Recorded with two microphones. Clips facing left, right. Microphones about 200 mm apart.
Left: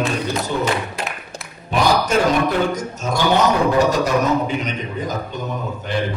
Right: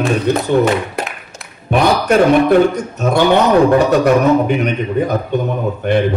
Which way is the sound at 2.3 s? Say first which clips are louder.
Right 8 dB; 60° right (ahead or behind).